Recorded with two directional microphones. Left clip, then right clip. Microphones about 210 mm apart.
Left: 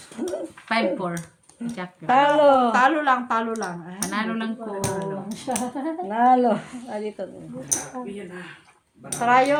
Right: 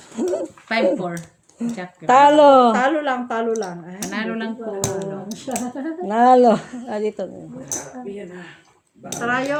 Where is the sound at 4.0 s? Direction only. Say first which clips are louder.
Right 1 dB; centre (ahead or behind).